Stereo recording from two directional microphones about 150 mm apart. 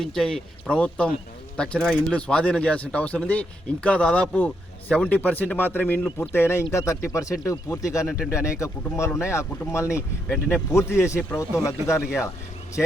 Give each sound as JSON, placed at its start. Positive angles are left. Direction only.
{"t": 0.0, "sound": "speech", "side_deg": 5}